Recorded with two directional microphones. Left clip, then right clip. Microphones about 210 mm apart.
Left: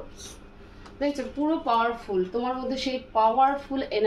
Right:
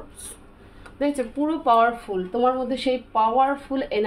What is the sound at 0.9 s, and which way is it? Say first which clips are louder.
Speech: right 4 dB; 50° right (ahead or behind).